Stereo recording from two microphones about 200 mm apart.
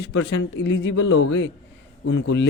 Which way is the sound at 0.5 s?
60° left (ahead or behind).